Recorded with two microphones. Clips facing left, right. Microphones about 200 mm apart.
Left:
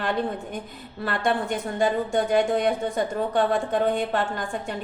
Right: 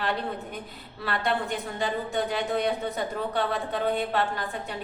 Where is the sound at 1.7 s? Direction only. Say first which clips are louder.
Left 7 dB; 50° left (ahead or behind).